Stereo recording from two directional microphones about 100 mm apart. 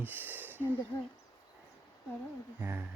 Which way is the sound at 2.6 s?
20° right (ahead or behind).